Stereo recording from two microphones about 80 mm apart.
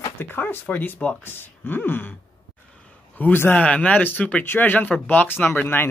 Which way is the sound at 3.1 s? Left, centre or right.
Left.